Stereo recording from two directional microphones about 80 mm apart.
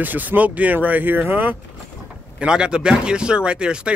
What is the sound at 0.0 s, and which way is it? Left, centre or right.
Speech, right.